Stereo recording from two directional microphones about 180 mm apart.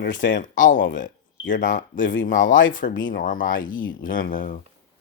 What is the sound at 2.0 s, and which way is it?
Speech, 90° left.